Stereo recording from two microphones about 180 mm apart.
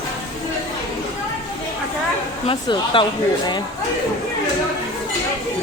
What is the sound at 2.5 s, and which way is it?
Speech, 30° left (ahead or behind).